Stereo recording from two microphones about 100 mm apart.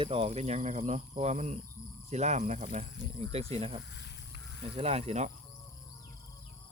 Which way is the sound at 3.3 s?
90° right.